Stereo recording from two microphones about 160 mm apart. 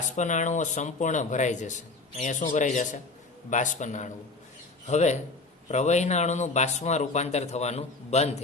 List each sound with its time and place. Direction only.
0.2 s a man's voice: 50° left (ahead or behind)